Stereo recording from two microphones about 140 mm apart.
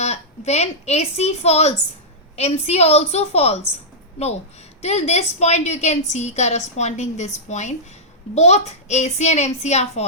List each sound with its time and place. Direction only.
0.0 s a woman's voice: 50° left (ahead or behind)
4.8 s a woman's voice: 50° left (ahead or behind)